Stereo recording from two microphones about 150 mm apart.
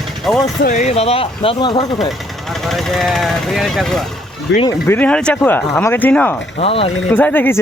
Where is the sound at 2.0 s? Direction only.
Centre (ahead or behind).